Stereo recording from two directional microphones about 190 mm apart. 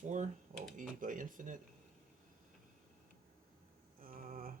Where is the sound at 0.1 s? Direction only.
40° right (ahead or behind).